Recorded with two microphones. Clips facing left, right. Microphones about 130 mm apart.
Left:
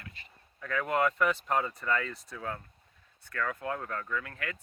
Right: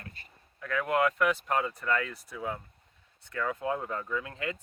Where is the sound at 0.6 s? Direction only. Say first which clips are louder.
Right 1 dB; 5° right (ahead or behind).